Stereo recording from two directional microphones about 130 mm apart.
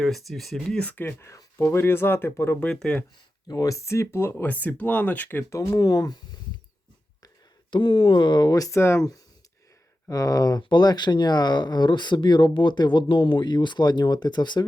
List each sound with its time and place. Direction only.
0.0 s speech: centre (ahead or behind); by 2.6 s 20° left (ahead or behind)
2.6 s speech: 5° left (ahead or behind)
3.4 s speech: 30° left (ahead or behind)
7.7 s speech: 40° left (ahead or behind); by 9.0 s 20° left (ahead or behind)
10.1 s speech: 30° left (ahead or behind)